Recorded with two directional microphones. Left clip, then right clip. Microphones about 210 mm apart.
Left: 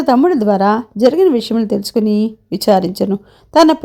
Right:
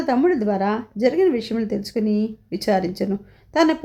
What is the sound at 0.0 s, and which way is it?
A woman's voice, 25° left (ahead or behind).